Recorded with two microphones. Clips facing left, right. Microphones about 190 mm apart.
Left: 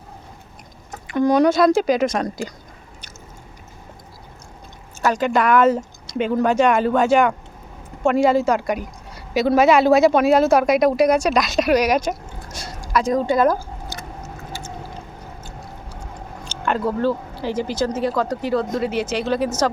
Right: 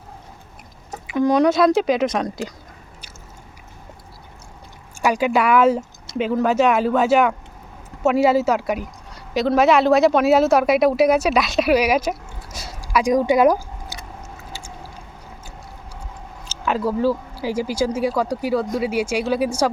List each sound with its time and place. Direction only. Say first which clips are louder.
1.0 s speech: left 1 dB; centre (ahead or behind)
4.9 s a woman's voice: even; 10° right (ahead or behind)
16.5 s speech: even; 5° right (ahead or behind)